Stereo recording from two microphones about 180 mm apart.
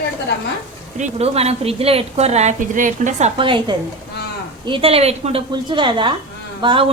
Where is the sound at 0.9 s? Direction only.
40° right (ahead or behind).